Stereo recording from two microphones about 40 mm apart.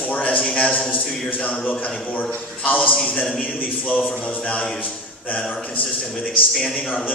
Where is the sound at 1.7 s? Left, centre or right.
Left.